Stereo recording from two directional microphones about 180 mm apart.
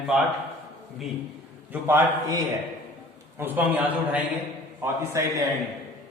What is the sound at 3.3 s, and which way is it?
Speech, 10° right (ahead or behind).